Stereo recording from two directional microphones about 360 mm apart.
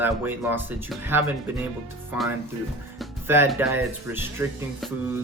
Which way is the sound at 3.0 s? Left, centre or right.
Centre.